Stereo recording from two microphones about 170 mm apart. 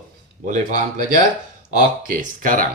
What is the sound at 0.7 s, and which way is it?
Speech, 50° right (ahead or behind).